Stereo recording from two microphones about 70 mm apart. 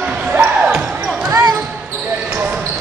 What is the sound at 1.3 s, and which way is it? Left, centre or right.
Basketball bounce, right.